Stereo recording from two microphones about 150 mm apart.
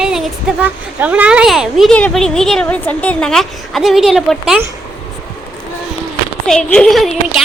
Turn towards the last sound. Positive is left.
turn(degrees=0)  # may be behind; listen again after turning